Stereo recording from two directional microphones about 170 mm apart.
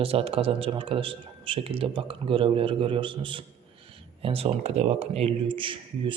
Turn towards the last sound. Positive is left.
turn(degrees=-30)  # may be behind; listen again after turning